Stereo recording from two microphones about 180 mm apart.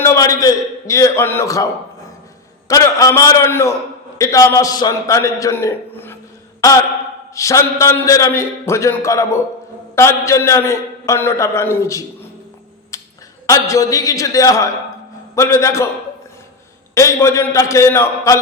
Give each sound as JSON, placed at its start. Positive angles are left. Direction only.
{"t": 0.0, "sound": "a man's voice", "side_deg": 15}
{"t": 2.6, "sound": "a man's voice", "side_deg": 20}
{"t": 6.6, "sound": "a sound", "side_deg": 15}
{"t": 7.3, "sound": "a man's voice", "side_deg": 15}
{"t": 12.9, "sound": "a sound", "side_deg": 15}
{"t": 13.5, "sound": "a man's voice", "side_deg": 20}
{"t": 16.9, "sound": "a man's voice", "side_deg": 15}